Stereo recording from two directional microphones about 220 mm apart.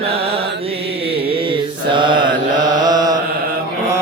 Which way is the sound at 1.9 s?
20° right (ahead or behind).